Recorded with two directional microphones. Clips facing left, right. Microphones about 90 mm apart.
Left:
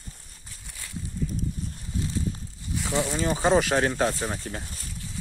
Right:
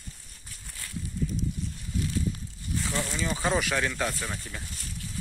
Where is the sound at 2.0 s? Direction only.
25° left (ahead or behind).